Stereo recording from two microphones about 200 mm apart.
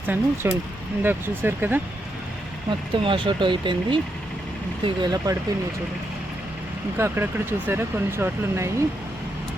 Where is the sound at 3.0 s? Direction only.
25° right (ahead or behind).